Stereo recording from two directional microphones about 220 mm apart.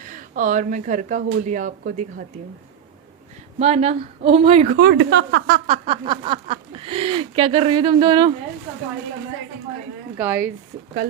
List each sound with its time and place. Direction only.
0.0 s speech: 35° right (ahead or behind)
3.6 s speech: 30° right (ahead or behind)
4.7 s speech: 45° right (ahead or behind)
5.6 s speech: 25° right (ahead or behind)
10.2 s speech: 10° right (ahead or behind)